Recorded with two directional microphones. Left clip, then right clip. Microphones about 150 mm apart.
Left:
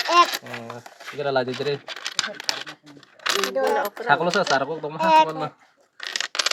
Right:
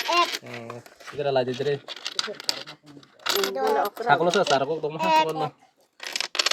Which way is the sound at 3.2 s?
30° left (ahead or behind).